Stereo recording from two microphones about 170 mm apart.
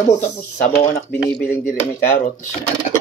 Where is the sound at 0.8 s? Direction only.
40° left (ahead or behind).